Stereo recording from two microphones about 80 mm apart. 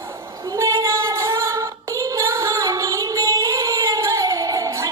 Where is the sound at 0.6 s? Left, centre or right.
Right.